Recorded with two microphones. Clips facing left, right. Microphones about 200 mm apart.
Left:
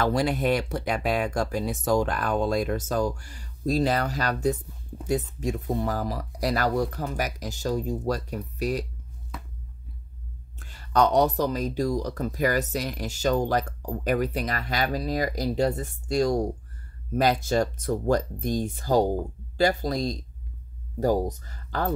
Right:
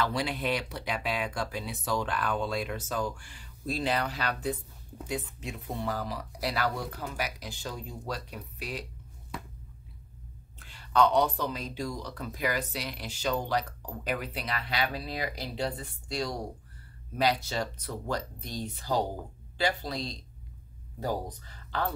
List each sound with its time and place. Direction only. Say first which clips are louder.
0.0 s speech: left 7 dB; 45° left (ahead or behind)
10.6 s speech: left 3 dB; 45° left (ahead or behind)